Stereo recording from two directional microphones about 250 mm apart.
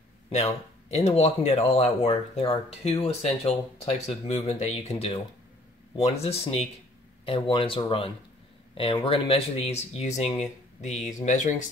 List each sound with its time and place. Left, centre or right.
0.3 s speech: left